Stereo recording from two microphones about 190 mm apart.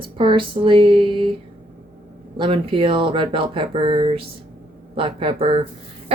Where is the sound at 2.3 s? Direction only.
30° right (ahead or behind).